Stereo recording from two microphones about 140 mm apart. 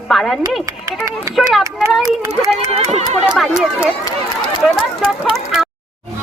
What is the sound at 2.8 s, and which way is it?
Speech, 50° right (ahead or behind).